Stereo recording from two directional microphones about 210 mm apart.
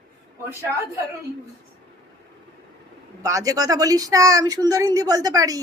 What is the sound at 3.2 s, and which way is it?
Speech, 15° right (ahead or behind).